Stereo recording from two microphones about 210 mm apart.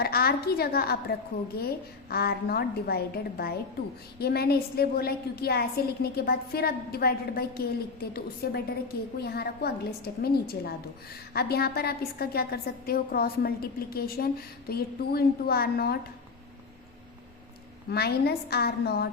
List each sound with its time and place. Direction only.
0.0 s a woman's voice: 45° left (ahead or behind)
17.9 s a woman's voice: 50° left (ahead or behind)